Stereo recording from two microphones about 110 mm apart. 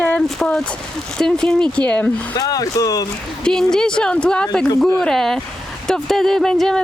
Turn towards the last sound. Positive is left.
turn(degrees=5)  # may be behind; listen again after turning